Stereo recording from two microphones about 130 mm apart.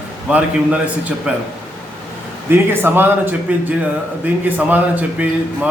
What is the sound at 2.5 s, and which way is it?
Speech, 15° right (ahead or behind).